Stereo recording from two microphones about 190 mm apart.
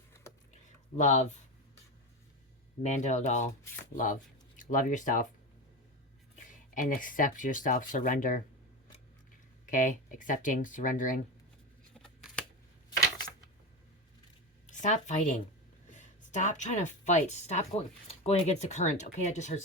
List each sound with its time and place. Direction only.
0.9 s speech: 40° left (ahead or behind)
2.8 s speech: 40° left (ahead or behind)
6.3 s speech: 45° left (ahead or behind)
9.6 s speech: 45° left (ahead or behind)
11.9 s scissors: centre (ahead or behind)
14.7 s speech: 40° left (ahead or behind)